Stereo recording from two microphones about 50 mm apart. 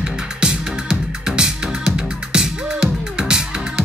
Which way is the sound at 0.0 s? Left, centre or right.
Centre.